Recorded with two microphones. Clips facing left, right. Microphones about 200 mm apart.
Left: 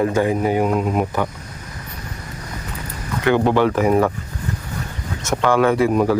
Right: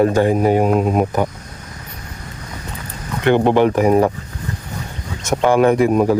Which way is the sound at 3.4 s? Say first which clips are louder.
Right 3 dB; 15° right (ahead or behind).